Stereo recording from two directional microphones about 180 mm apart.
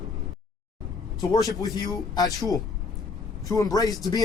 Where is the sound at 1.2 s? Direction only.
20° left (ahead or behind).